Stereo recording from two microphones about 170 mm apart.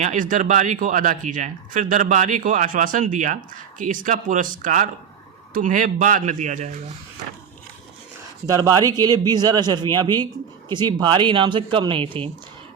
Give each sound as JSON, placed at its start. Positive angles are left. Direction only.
{"t": 0.0, "sound": "speech", "side_deg": -50}
{"t": 8.4, "sound": "speech", "side_deg": -20}